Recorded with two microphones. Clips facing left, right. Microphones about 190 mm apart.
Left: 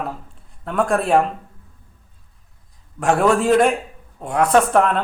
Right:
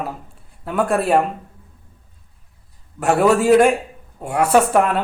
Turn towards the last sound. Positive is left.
turn(degrees=-5)  # may be behind; listen again after turning